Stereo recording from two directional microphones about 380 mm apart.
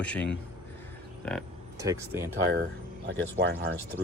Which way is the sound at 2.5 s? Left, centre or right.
Right.